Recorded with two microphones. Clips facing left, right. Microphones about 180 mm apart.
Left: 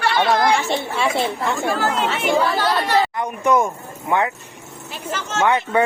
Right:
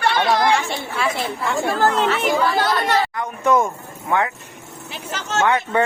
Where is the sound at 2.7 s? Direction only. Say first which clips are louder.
Left 1 dB; 20° left (ahead or behind).